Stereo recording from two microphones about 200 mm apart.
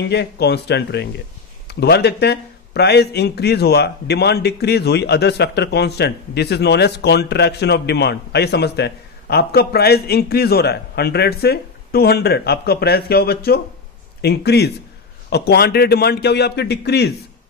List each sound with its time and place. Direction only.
0.0 s a man's voice: 55° left (ahead or behind)